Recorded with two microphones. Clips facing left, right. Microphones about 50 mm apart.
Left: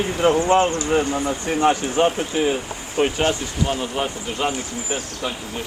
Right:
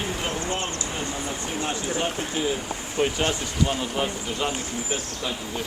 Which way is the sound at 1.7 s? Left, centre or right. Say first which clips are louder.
Left 8 dB; left.